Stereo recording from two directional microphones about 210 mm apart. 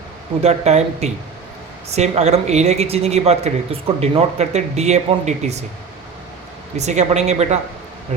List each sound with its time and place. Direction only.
0.4 s speech: 30° right (ahead or behind)
6.7 s speech: 30° right (ahead or behind)